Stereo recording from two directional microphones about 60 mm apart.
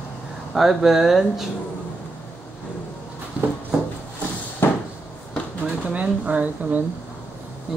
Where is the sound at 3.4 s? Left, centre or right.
Centre.